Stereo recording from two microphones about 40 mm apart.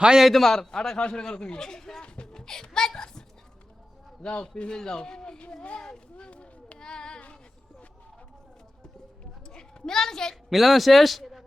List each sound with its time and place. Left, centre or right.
0.0 s a man's voice: centre
0.3 s a child's voice: centre
4.4 s a man's voice: left
6.7 s speech: centre
9.5 s a sound: centre
10.5 s a man's voice: centre